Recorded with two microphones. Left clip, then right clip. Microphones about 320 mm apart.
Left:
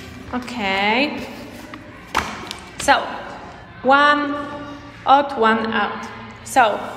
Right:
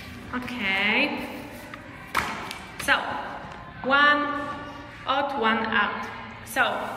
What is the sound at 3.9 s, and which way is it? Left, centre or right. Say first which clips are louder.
A woman's voice: left 5 dB; centre.